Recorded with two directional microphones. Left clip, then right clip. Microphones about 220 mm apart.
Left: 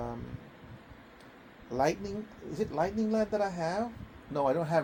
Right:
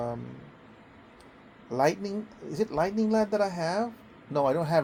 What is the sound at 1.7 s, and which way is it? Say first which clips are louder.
Speech: right 4 dB; 35° right (ahead or behind).